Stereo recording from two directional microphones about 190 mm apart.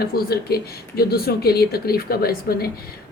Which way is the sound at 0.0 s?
55° left (ahead or behind).